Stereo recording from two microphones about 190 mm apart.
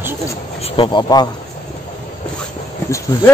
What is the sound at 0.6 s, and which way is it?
Speech, 25° left (ahead or behind).